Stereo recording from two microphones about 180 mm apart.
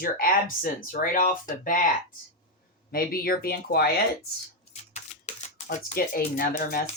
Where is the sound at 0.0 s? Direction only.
50° left (ahead or behind).